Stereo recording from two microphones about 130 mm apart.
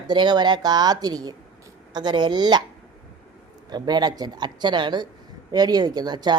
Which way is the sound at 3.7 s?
30° right (ahead or behind).